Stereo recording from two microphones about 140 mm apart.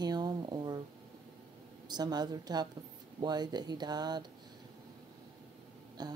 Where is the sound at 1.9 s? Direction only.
30° right (ahead or behind).